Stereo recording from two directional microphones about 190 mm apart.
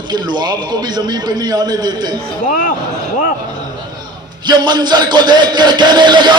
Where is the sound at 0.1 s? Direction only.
25° right (ahead or behind).